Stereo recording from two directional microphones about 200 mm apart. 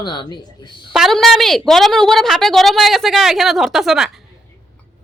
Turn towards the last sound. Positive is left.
turn(degrees=0)  # may be behind; listen again after turning